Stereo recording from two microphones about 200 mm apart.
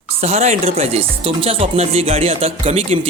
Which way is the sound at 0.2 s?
30° right (ahead or behind).